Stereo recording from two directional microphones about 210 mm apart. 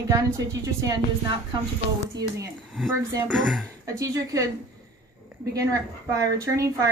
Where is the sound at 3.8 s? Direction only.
15° right (ahead or behind).